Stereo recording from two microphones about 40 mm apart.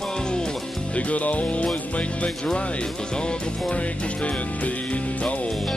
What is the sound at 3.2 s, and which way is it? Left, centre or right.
Music, left.